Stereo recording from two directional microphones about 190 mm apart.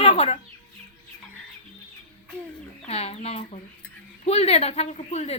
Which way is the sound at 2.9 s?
35° left (ahead or behind).